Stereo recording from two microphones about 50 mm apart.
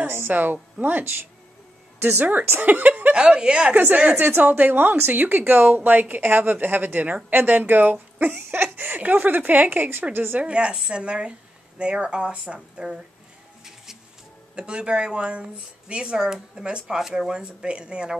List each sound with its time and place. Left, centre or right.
0.0 s a sound: right
0.7 s a woman's voice: right
3.2 s speech: centre
3.7 s a woman's voice: right
10.4 s speech: right
14.5 s speech: right